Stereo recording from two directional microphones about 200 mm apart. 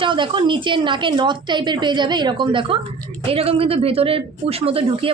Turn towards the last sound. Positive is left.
turn(degrees=-30)  # may be behind; listen again after turning